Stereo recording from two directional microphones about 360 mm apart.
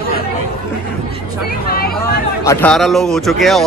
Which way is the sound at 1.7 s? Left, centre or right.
Left.